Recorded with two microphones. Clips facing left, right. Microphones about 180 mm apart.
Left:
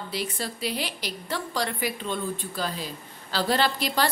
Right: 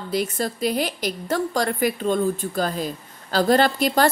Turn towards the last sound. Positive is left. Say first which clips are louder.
# right 6 dB
turn(degrees=-45)  # may be behind; listen again after turning